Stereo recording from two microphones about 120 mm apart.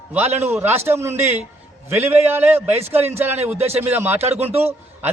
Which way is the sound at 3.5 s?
60° right (ahead or behind).